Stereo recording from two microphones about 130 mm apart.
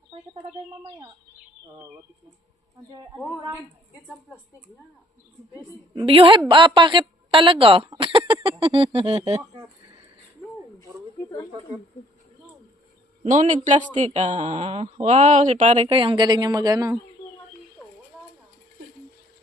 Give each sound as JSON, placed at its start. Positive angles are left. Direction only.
{"t": 5.9, "sound": "speech", "side_deg": -40}
{"t": 13.2, "sound": "speech", "side_deg": -70}
{"t": 15.9, "sound": "a woman's voice", "side_deg": -40}